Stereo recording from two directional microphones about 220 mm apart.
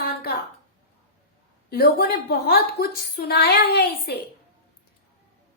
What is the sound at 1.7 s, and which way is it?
A woman's voice, 45° left (ahead or behind).